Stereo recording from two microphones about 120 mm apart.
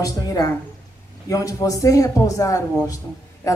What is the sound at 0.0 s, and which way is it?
Speech, 30° left (ahead or behind).